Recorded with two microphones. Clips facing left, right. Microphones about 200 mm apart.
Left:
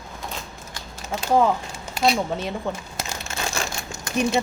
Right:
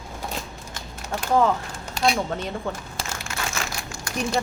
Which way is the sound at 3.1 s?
25° left (ahead or behind).